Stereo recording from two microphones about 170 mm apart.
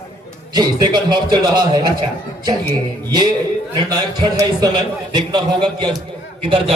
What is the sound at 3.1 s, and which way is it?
A man's voice, 25° right (ahead or behind).